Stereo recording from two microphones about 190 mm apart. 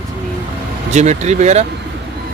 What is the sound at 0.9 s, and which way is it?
Speech, 35° right (ahead or behind).